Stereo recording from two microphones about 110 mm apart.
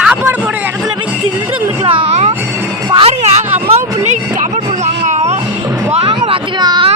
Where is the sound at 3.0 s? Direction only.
65° right (ahead or behind).